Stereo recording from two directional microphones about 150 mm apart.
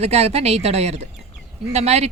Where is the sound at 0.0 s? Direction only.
45° right (ahead or behind).